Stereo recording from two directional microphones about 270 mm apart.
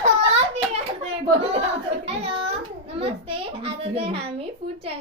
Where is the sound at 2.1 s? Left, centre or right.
Right.